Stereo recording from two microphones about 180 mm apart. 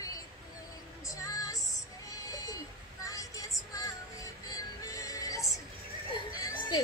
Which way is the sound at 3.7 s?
20° left (ahead or behind).